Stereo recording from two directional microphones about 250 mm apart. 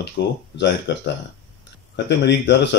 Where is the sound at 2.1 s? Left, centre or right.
Left.